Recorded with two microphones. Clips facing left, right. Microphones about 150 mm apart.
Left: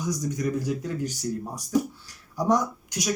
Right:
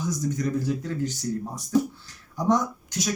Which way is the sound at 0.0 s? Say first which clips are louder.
Right 1 dB; 15° left (ahead or behind).